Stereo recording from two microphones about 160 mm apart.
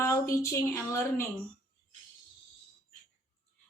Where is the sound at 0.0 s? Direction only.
20° left (ahead or behind).